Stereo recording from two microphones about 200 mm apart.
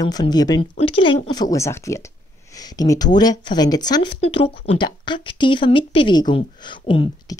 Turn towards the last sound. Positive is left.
turn(degrees=25)  # may be behind; listen again after turning